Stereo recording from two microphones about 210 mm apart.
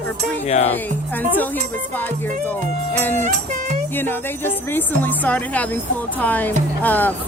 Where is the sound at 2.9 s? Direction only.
10° left (ahead or behind).